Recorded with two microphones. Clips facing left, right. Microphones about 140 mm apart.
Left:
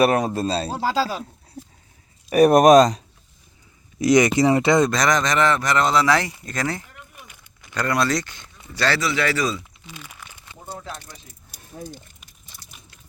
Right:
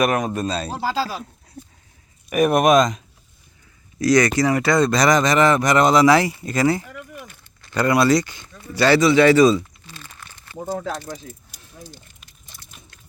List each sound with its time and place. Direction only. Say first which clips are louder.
0.0 s speech: left 2 dB; 30° left (ahead or behind)
2.3 s speech: left 3 dB; 35° left (ahead or behind)
3.9 s speech: even; 20° left (ahead or behind)
4.9 s speech: right 4 dB; 5° right (ahead or behind)
6.8 s a sound: right 9 dB; 70° right (ahead or behind)
7.7 s speech: right 5 dB; 10° right (ahead or behind)
9.0 s speech: right 10 dB; 25° right (ahead or behind)
9.8 s crumpling: left 1 dB; 15° left (ahead or behind)
10.6 s speech: right 9 dB; 60° right (ahead or behind)
11.7 s speech: left 6 dB; 50° left (ahead or behind)